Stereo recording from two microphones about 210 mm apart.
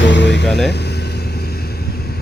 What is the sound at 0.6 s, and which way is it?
Vehicle, 50° left (ahead or behind).